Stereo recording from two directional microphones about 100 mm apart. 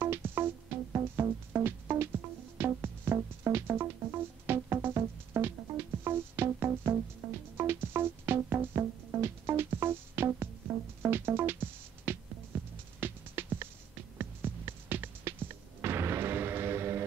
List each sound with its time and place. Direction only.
0.0 s music: 20° right (ahead or behind)